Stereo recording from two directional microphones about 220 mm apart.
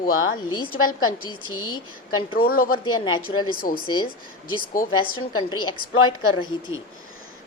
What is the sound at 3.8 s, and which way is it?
Speech, 20° left (ahead or behind).